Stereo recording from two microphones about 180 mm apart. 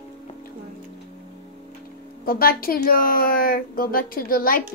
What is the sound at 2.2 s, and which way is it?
Speech, 55° left (ahead or behind).